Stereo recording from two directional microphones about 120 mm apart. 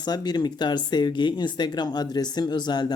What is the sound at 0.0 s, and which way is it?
Speech, 35° left (ahead or behind).